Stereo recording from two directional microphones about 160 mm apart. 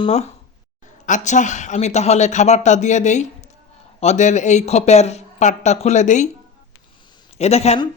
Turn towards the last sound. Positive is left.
turn(degrees=40)  # may be behind; listen again after turning